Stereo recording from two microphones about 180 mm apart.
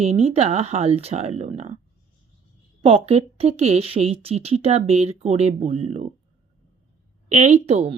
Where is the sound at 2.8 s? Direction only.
30° right (ahead or behind).